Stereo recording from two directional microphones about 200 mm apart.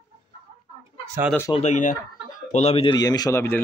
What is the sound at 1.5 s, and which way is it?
Speech, 35° left (ahead or behind).